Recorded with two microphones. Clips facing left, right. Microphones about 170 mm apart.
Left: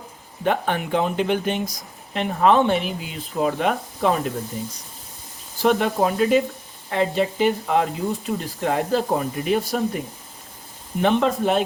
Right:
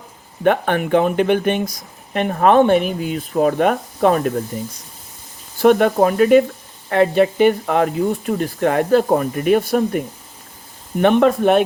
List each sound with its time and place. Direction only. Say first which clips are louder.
0.4 s speech: right 6 dB; 60° right (ahead or behind)
5.5 s speech: right 6 dB; 55° right (ahead or behind)
11.0 s speech: right 6 dB; 60° right (ahead or behind)